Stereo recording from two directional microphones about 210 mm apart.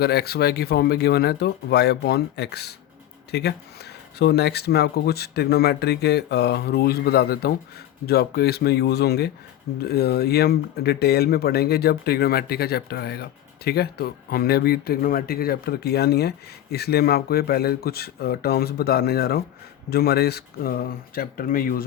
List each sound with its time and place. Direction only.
0.0 s speech: 50° left (ahead or behind)